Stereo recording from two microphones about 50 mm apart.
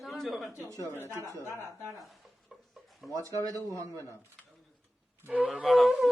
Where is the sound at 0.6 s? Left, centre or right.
Right.